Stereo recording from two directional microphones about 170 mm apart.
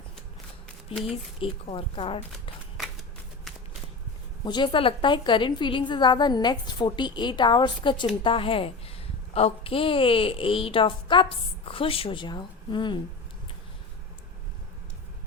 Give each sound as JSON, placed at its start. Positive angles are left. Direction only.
{"t": 1.1, "sound": "a woman's voice", "side_deg": 30}
{"t": 4.4, "sound": "a woman's voice", "side_deg": 25}